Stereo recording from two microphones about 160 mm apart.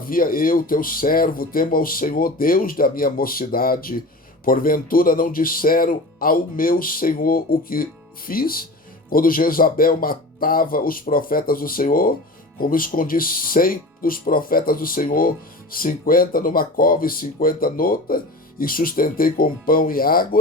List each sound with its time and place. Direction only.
0.0 s speech: 60° left (ahead or behind)